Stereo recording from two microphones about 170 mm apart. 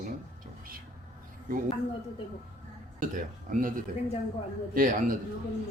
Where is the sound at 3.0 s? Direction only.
50° right (ahead or behind).